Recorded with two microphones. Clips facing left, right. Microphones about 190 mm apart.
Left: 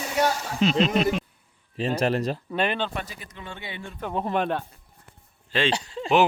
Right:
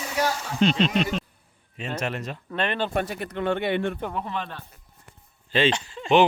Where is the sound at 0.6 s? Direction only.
5° left (ahead or behind).